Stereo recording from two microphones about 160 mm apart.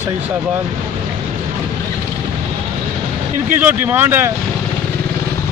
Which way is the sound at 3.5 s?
10° right (ahead or behind).